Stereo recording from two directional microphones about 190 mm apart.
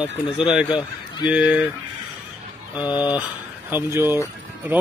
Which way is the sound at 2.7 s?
20° left (ahead or behind).